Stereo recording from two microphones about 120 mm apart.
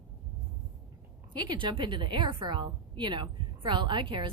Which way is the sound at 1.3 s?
40° right (ahead or behind).